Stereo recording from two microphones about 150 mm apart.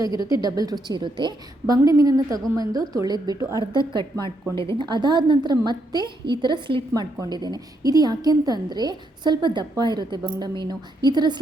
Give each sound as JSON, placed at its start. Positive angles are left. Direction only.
{"t": 0.0, "sound": "a woman's voice", "side_deg": -25}
{"t": 4.8, "sound": "a woman's voice", "side_deg": -30}